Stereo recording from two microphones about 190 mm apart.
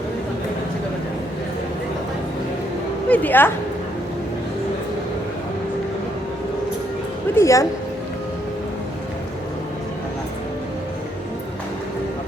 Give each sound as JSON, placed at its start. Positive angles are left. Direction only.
{"t": 3.1, "sound": "a woman's voice", "side_deg": 10}
{"t": 7.3, "sound": "a woman's voice", "side_deg": 15}